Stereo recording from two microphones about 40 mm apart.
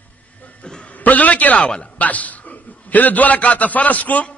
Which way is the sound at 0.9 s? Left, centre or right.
Left.